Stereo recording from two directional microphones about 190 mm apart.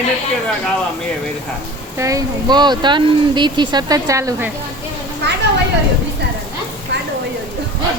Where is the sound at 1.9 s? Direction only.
15° right (ahead or behind).